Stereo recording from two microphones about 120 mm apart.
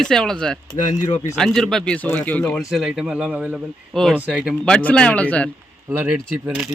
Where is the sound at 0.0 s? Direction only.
5° left (ahead or behind).